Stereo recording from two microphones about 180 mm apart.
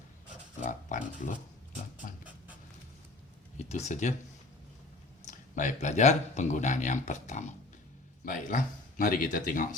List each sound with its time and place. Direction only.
0.6 s speech: 45° left (ahead or behind)
3.7 s speech: 35° left (ahead or behind)
5.2 s speech: 45° left (ahead or behind)